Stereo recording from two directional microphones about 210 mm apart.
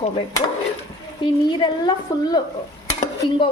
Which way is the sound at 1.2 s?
20° left (ahead or behind).